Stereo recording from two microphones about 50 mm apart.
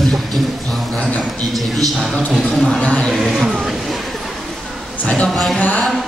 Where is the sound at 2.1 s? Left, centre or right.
Centre.